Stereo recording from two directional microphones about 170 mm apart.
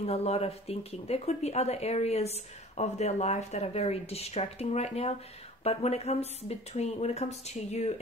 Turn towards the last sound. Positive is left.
turn(degrees=40)  # may be behind; listen again after turning